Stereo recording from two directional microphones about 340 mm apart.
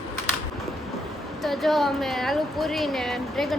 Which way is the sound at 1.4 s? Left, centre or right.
Centre.